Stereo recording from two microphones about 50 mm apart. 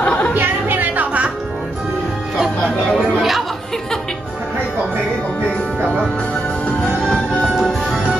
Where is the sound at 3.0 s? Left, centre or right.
Centre.